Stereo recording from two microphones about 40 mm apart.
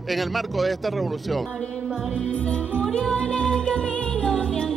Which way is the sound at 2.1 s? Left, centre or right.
Left.